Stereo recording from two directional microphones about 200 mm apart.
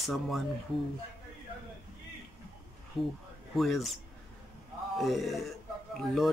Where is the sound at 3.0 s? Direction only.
Centre (ahead or behind).